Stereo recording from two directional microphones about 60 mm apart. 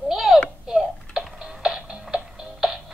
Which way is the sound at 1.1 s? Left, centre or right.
Centre.